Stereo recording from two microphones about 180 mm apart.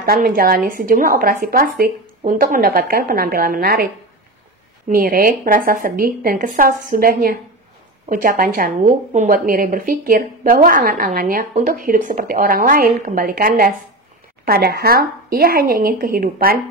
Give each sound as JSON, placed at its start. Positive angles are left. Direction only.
{"t": 0.0, "sound": "speech", "side_deg": -55}
{"t": 4.8, "sound": "a woman's voice", "side_deg": -50}